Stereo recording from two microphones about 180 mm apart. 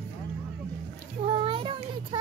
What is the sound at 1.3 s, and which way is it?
Child singing, 30° right (ahead or behind).